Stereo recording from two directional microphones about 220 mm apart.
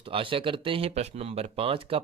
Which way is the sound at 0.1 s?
25° right (ahead or behind).